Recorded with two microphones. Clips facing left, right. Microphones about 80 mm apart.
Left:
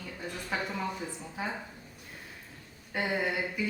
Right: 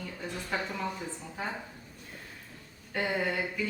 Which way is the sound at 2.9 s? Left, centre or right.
Centre.